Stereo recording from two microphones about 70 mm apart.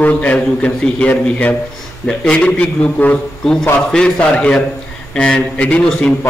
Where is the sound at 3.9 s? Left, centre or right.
Centre.